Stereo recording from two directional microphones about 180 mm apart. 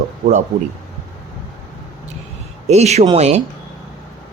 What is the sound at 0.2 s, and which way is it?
Speech, 40° right (ahead or behind).